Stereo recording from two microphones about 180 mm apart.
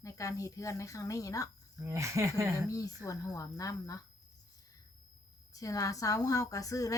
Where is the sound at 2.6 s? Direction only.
20° left (ahead or behind).